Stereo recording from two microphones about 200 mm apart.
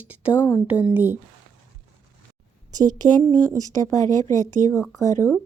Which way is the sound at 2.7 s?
20° right (ahead or behind).